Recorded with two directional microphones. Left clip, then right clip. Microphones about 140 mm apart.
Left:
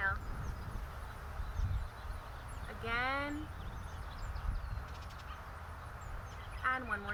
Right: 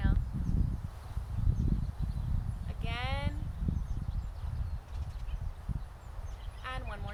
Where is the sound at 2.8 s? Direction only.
35° right (ahead or behind).